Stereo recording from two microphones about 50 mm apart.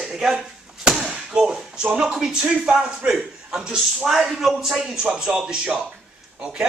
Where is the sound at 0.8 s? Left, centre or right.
Centre.